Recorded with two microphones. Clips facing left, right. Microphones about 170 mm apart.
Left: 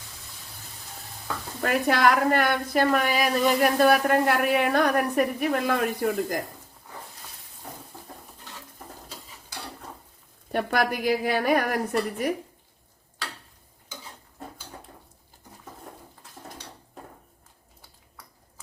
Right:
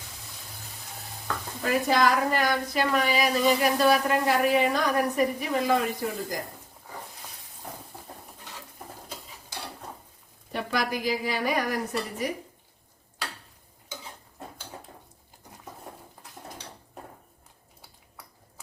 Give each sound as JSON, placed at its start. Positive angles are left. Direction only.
{"t": 1.6, "sound": "speech", "side_deg": 60}
{"t": 10.5, "sound": "speech", "side_deg": 55}